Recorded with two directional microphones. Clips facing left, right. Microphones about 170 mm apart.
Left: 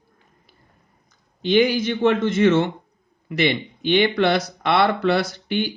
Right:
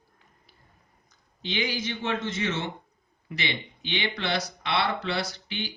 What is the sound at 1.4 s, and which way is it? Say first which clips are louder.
Speech: left 13 dB; 55° left (ahead or behind).